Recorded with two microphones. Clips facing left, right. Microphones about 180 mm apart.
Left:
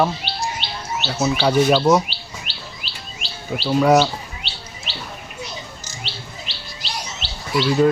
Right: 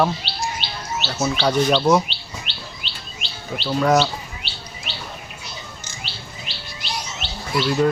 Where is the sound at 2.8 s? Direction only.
5° left (ahead or behind).